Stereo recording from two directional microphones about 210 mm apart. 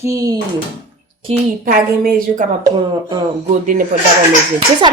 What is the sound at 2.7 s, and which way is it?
Speech, 20° right (ahead or behind).